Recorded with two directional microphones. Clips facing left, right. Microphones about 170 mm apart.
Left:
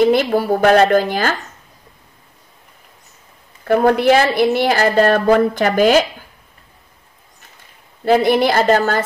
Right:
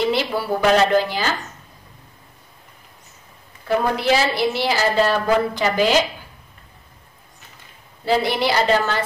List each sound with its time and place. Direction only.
0.0 s a woman's voice: 50° left (ahead or behind)
3.6 s a woman's voice: 55° left (ahead or behind)
8.0 s a woman's voice: 50° left (ahead or behind)